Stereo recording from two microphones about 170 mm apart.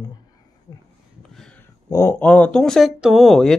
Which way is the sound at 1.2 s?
5° left (ahead or behind).